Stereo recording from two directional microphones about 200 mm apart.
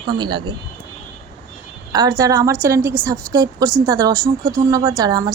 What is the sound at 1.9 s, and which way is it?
A woman's voice, 20° right (ahead or behind).